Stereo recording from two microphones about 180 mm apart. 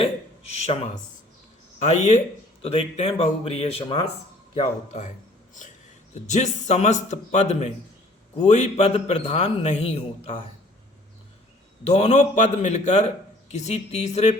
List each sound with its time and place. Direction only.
0.5 s a man's voice: 35° left (ahead or behind)
6.2 s a man's voice: 40° left (ahead or behind)
11.8 s a man's voice: 35° left (ahead or behind)